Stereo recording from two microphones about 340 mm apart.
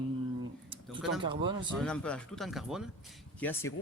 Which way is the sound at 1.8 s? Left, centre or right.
Centre.